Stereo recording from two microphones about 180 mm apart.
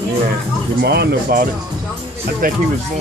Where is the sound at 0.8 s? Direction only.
65° right (ahead or behind).